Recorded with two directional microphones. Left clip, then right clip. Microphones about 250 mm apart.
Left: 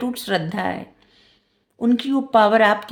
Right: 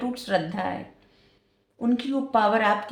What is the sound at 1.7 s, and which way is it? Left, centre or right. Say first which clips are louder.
Speech: left 6 dB; left.